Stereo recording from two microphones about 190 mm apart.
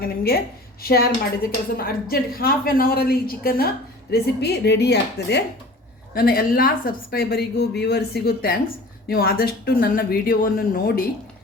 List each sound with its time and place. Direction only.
0.0 s a woman's voice: 55° left (ahead or behind)
6.1 s a woman's voice: 50° left (ahead or behind)